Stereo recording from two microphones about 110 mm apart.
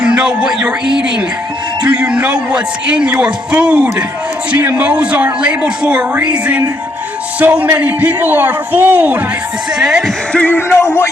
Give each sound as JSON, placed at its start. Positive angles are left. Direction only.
{"t": 0.0, "sound": "a man's voice", "side_deg": -10}
{"t": 9.7, "sound": "speech", "side_deg": -5}
{"t": 10.3, "sound": "speech", "side_deg": 15}